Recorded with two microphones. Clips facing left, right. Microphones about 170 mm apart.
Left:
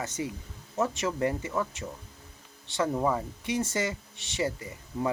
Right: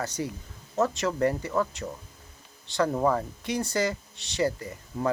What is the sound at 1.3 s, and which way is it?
Speech, 40° right (ahead or behind).